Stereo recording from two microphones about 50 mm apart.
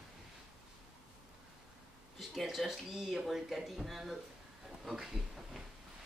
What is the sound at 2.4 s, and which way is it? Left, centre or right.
Speech, centre.